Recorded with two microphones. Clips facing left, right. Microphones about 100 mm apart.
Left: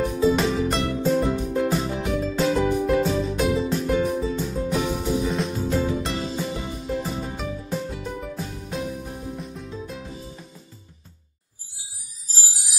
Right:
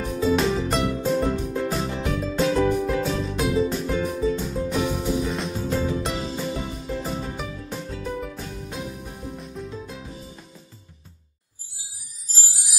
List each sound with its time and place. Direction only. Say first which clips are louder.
0.0 s music: left 1 dB; centre (ahead or behind)